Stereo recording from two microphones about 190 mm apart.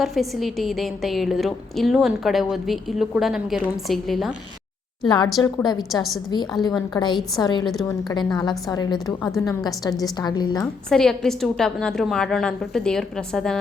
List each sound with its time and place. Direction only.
0.0 s a woman's voice: centre (ahead or behind)
5.0 s a woman's voice: 25° left (ahead or behind)
5.9 s a woman's voice: centre (ahead or behind)
6.3 s a woman's voice: 25° left (ahead or behind)
10.8 s a woman's voice: centre (ahead or behind)